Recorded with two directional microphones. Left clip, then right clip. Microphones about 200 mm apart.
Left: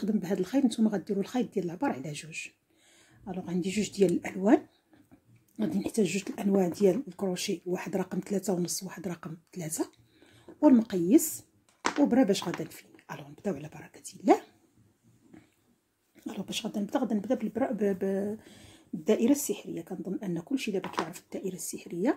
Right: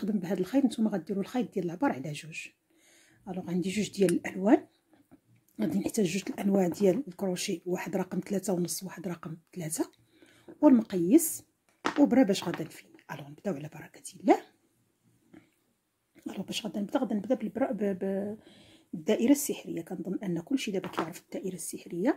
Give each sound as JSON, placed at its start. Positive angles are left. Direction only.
{"t": 0.0, "sound": "speech", "side_deg": -10}
{"t": 5.6, "sound": "speech", "side_deg": -15}
{"t": 16.3, "sound": "speech", "side_deg": -10}
{"t": 19.1, "sound": "speech", "side_deg": -15}